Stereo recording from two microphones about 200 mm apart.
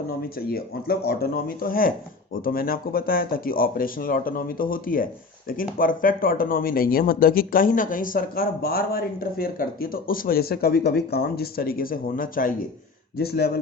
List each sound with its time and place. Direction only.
0.2 s speech: 50° left (ahead or behind)